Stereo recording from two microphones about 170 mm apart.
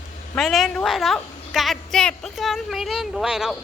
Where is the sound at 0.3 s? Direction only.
Centre (ahead or behind).